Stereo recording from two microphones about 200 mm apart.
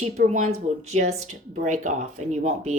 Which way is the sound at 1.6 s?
40° right (ahead or behind).